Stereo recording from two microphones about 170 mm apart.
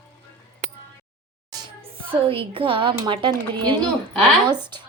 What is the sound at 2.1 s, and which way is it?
A woman's voice, 30° right (ahead or behind).